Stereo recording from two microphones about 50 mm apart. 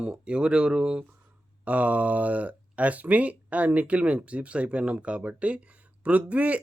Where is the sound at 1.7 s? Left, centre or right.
Right.